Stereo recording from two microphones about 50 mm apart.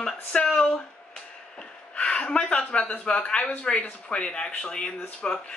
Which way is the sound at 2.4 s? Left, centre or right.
Centre.